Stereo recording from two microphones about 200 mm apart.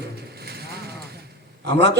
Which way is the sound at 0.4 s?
55° right (ahead or behind).